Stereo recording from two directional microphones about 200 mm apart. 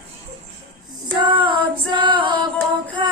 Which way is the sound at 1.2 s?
25° right (ahead or behind).